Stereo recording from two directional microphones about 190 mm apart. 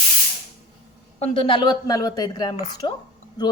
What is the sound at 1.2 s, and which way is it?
A woman's voice, 30° left (ahead or behind).